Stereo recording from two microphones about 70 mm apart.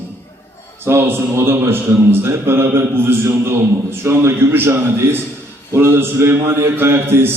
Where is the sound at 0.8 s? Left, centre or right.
Right.